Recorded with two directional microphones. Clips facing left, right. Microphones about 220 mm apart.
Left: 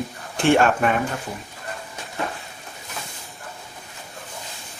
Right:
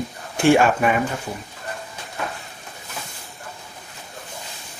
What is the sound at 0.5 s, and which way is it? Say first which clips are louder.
Speech: right 1 dB; 5° right (ahead or behind).